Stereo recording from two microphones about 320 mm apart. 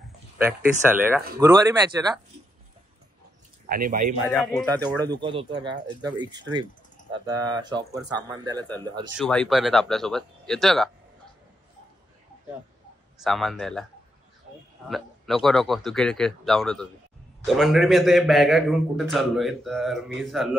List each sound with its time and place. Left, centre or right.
0.4 s a man's voice: centre
3.6 s speech: right
4.3 s a man's voice: centre
5.1 s speech: centre
9.1 s a man's voice: centre
13.2 s a man's voice: centre
14.9 s a man's voice: centre